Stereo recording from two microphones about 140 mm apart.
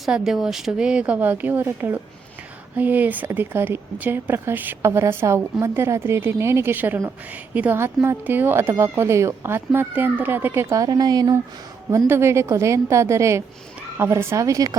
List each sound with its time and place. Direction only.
0.0 s a woman's voice: centre (ahead or behind); by 14.8 s 25° right (ahead or behind)